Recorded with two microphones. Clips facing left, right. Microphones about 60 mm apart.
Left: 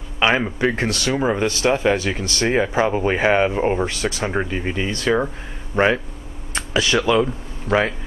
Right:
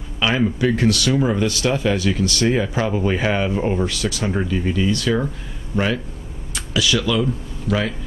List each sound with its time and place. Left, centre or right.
0.2 s speech: left